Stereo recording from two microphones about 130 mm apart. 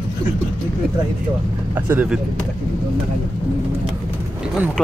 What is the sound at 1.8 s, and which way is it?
Speech, 10° right (ahead or behind).